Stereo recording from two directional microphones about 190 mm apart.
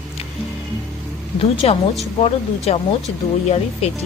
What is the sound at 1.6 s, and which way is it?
Speech, 30° left (ahead or behind).